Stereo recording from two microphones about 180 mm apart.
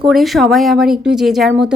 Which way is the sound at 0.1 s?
Centre (ahead or behind).